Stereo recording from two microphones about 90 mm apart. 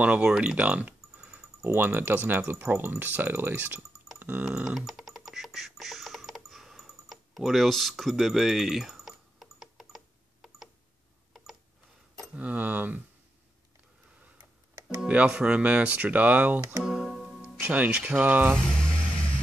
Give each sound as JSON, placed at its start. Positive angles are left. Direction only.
{"t": 0.0, "sound": "speech", "side_deg": -15}
{"t": 4.2, "sound": "a sound", "side_deg": -15}
{"t": 12.4, "sound": "speech", "side_deg": -15}
{"t": 15.0, "sound": "speech", "side_deg": -10}
{"t": 16.8, "sound": "music", "side_deg": -5}
{"t": 17.6, "sound": "speech", "side_deg": -20}
{"t": 18.8, "sound": "music", "side_deg": 10}